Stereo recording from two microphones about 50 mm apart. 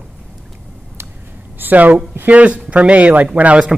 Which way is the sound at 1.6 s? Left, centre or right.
Right.